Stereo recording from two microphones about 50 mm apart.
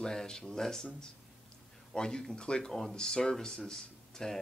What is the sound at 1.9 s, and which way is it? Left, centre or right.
Speech, centre.